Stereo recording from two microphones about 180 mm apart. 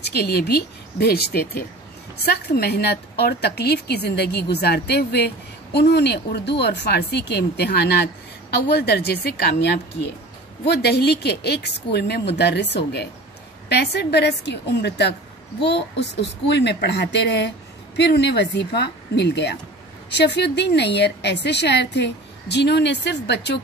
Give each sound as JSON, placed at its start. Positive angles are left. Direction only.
{"t": 0.2, "sound": "a woman's voice", "side_deg": 65}